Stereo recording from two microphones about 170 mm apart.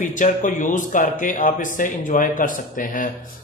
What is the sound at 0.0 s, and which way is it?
Speech, 50° left (ahead or behind).